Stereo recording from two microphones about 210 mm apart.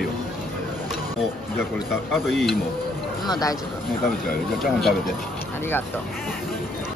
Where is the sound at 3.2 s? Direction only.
20° left (ahead or behind).